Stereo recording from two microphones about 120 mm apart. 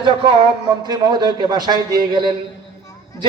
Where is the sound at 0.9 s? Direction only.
35° right (ahead or behind).